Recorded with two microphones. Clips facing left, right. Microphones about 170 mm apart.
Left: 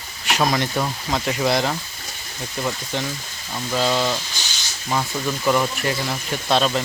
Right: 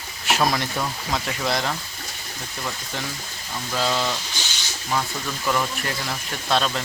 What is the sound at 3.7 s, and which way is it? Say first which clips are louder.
Speech: left 3 dB; 5° left (ahead or behind).